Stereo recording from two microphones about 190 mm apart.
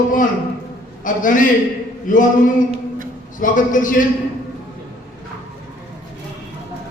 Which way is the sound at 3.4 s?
45° left (ahead or behind).